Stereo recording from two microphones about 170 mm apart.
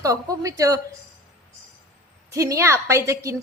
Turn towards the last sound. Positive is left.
turn(degrees=-15)  # may be behind; listen again after turning